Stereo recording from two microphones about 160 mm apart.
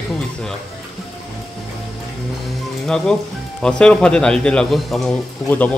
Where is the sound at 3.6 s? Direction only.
5° left (ahead or behind).